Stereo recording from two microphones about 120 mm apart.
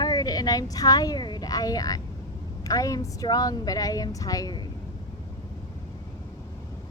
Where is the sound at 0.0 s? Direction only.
35° left (ahead or behind).